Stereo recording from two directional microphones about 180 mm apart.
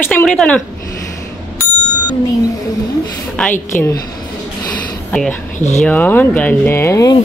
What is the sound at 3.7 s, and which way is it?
Speech, 15° left (ahead or behind).